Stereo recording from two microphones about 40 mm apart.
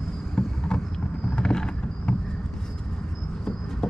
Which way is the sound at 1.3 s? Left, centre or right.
Centre.